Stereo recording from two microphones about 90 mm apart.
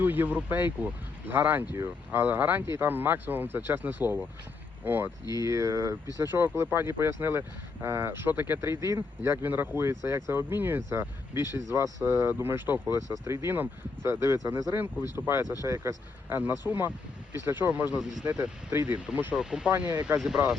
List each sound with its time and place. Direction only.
0.0 s speech: 20° right (ahead or behind)
5.4 s speech: 35° right (ahead or behind)
15.6 s speech: 35° right (ahead or behind); by 18.3 s 15° right (ahead or behind)
18.7 s speech: 25° right (ahead or behind)
18.9 s speech: 15° right (ahead or behind)